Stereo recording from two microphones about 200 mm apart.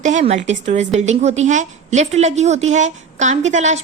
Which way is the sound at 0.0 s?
35° right (ahead or behind).